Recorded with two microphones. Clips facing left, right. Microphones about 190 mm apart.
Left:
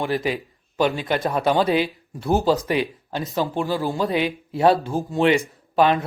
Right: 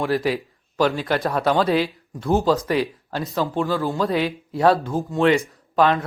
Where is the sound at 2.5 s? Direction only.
30° left (ahead or behind).